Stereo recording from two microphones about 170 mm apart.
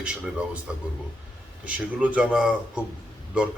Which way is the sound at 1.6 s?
10° right (ahead or behind).